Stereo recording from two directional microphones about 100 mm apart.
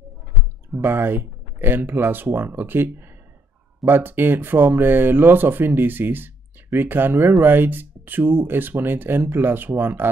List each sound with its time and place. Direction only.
0.7 s speech: 20° right (ahead or behind)